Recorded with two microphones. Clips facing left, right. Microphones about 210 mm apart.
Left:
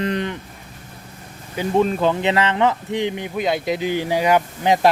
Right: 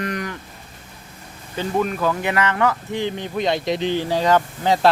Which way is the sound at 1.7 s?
25° left (ahead or behind).